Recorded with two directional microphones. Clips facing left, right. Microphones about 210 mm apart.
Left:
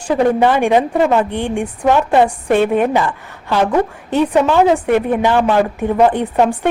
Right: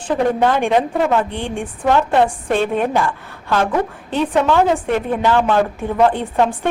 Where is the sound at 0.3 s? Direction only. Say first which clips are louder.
Left 3 dB; 15° left (ahead or behind).